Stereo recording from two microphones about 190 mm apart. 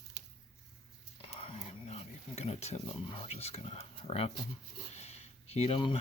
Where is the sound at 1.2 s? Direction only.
30° left (ahead or behind).